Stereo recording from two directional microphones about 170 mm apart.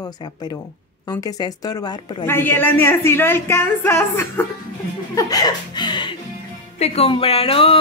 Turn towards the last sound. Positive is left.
turn(degrees=35)  # may be behind; listen again after turning